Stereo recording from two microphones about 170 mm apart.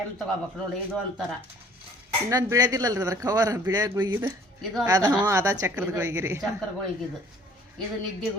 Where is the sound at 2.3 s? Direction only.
20° right (ahead or behind).